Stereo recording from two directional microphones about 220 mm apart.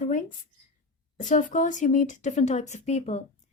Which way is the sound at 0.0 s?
35° left (ahead or behind).